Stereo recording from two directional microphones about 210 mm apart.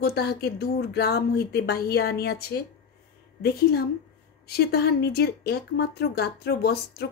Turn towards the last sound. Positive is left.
turn(degrees=50)  # may be behind; listen again after turning